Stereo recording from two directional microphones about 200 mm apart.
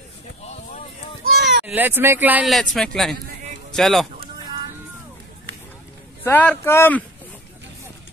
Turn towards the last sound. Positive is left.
turn(degrees=10)  # may be behind; listen again after turning